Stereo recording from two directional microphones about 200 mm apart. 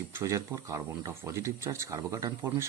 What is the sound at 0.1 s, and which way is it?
Speech, 15° right (ahead or behind).